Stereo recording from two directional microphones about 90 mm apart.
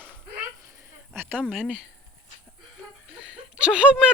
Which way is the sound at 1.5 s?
10° right (ahead or behind).